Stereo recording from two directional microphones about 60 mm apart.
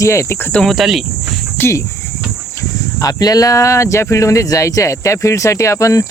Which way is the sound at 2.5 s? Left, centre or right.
Left.